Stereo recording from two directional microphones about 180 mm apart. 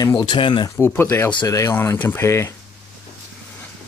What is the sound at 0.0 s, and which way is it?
Speech, 25° left (ahead or behind).